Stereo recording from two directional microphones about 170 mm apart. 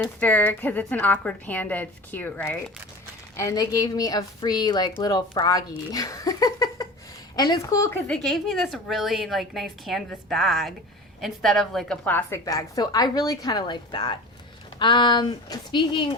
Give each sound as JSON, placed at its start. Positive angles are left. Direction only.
{"t": 0.0, "sound": "a woman's voice", "side_deg": 10}
{"t": 3.3, "sound": "a woman's voice", "side_deg": 20}
{"t": 8.0, "sound": "a woman's voice", "side_deg": 5}